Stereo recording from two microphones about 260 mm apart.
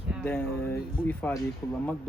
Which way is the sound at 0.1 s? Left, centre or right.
Centre.